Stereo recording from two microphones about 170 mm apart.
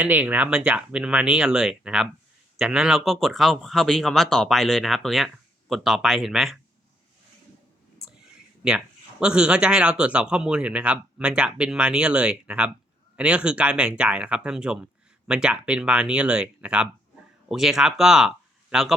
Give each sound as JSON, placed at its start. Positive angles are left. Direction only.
{"t": 0.0, "sound": "speech", "side_deg": -10}
{"t": 8.6, "sound": "speech", "side_deg": -5}